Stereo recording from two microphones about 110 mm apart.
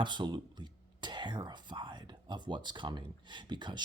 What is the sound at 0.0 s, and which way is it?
Speech, 45° right (ahead or behind).